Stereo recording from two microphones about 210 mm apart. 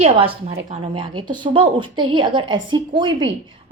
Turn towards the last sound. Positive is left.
turn(degrees=-25)  # may be behind; listen again after turning